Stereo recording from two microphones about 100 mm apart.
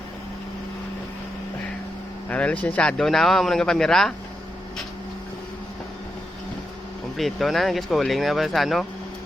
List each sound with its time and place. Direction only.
2.3 s speech: 15° left (ahead or behind)
7.2 s speech: centre (ahead or behind)